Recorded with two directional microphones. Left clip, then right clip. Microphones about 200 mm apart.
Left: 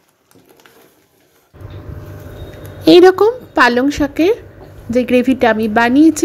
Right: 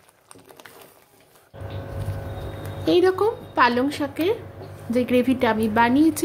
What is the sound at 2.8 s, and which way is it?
A woman's voice, 35° left (ahead or behind).